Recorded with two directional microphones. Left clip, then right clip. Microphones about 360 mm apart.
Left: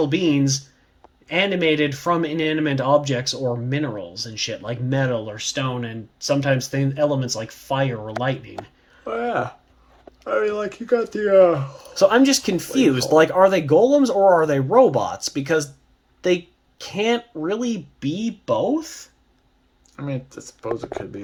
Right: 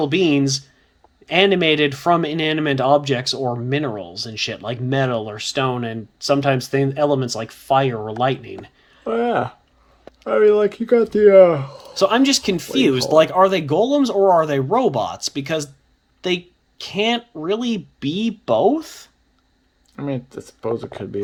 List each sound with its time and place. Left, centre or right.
0.0 s speech: centre
9.0 s speech: right
11.9 s speech: centre
20.0 s speech: right